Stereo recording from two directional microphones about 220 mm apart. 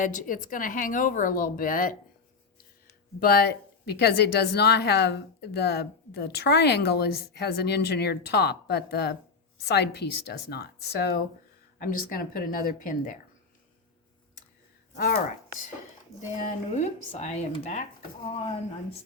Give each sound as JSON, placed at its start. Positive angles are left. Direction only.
{"t": 0.0, "sound": "speech", "side_deg": 35}
{"t": 3.2, "sound": "a woman's voice", "side_deg": 45}
{"t": 14.9, "sound": "speech", "side_deg": 40}
{"t": 16.3, "sound": "speech", "side_deg": 35}